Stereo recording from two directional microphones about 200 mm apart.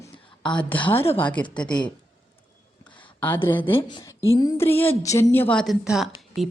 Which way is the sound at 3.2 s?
10° left (ahead or behind).